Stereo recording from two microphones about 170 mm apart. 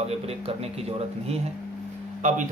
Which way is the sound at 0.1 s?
35° right (ahead or behind).